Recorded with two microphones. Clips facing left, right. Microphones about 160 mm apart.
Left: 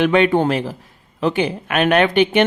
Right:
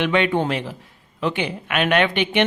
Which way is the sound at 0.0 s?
45° left (ahead or behind).